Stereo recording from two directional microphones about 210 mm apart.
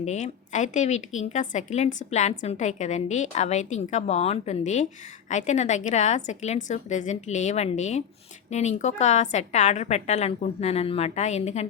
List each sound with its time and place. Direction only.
0.0 s a woman's voice: 35° left (ahead or behind)